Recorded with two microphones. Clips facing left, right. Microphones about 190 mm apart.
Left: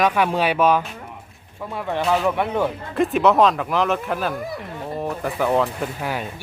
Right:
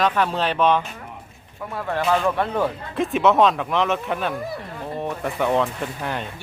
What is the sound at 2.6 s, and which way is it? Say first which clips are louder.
Speech: left 2 dB; centre (ahead or behind).